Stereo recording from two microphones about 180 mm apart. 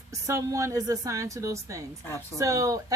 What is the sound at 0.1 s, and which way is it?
A woman's voice, 15° right (ahead or behind).